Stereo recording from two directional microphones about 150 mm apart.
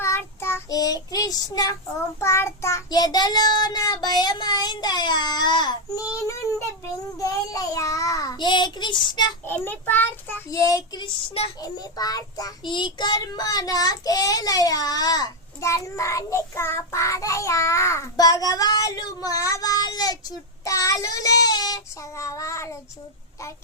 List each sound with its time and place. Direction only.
0.0 s child singing: 15° left (ahead or behind)
9.4 s child singing: 15° left (ahead or behind)